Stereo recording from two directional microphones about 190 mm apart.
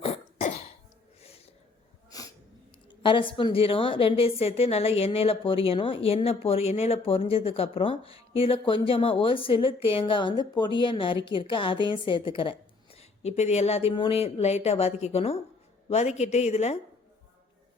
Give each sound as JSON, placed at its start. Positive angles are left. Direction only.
{"t": 0.0, "sound": "cough", "side_deg": 35}
{"t": 2.0, "sound": "wheeze", "side_deg": 20}
{"t": 3.0, "sound": "a woman's voice", "side_deg": 25}